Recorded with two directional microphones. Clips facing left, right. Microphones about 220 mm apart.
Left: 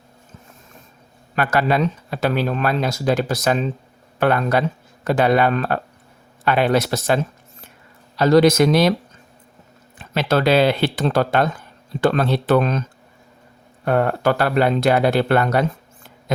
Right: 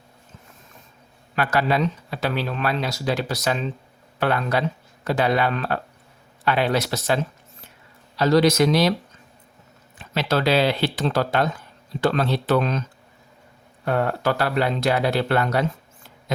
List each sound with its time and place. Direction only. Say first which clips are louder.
1.4 s speech: left 3 dB; 50° left (ahead or behind)
10.2 s speech: left 4 dB; 50° left (ahead or behind)
13.8 s speech: left 4 dB; 55° left (ahead or behind)